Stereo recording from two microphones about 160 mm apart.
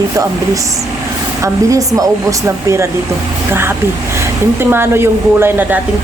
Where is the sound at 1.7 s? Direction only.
20° right (ahead or behind).